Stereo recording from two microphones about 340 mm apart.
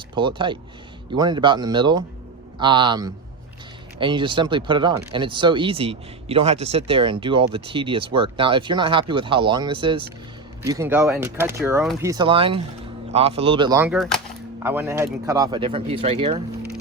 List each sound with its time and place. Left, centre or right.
0.2 s speech: centre